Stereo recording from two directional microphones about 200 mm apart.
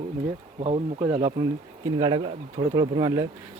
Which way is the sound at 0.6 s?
30° right (ahead or behind).